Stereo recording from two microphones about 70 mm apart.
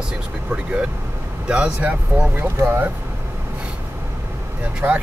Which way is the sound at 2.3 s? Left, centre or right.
Right.